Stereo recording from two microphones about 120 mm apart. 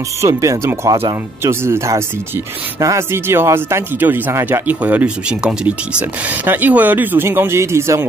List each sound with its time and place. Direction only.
0.2 s speech: 25° right (ahead or behind)